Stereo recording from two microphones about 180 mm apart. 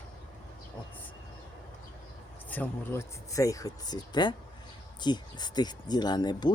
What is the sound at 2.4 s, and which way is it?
Speech, 10° left (ahead or behind).